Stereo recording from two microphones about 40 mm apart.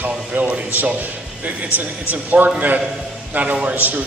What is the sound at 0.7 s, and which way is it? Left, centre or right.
A man's voice, right.